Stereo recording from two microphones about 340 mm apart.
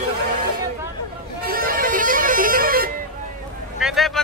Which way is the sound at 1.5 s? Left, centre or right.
Right.